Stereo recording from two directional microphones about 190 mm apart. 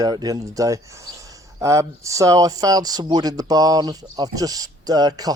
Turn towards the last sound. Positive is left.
turn(degrees=-20)  # may be behind; listen again after turning